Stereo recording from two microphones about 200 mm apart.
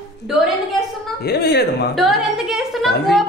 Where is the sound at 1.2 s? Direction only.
55° left (ahead or behind).